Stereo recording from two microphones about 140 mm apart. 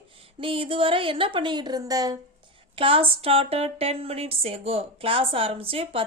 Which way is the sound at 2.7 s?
40° right (ahead or behind).